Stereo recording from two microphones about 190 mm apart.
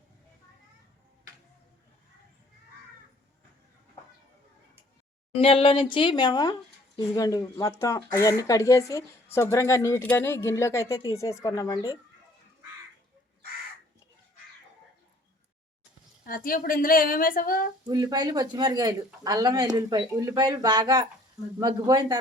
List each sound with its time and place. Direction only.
5.4 s speech: 30° left (ahead or behind)
16.2 s a woman's voice: 50° left (ahead or behind)
17.8 s speech: 20° right (ahead or behind)